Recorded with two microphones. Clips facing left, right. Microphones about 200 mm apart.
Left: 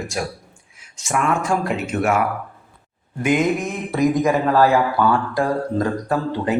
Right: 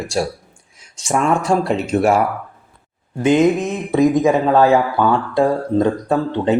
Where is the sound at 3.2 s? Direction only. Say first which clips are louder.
Right 5 dB; 25° right (ahead or behind).